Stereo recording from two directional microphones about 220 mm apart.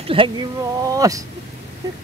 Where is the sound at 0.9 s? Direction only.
15° right (ahead or behind).